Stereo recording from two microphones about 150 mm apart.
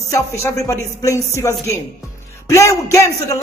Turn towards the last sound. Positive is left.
turn(degrees=20)  # may be behind; listen again after turning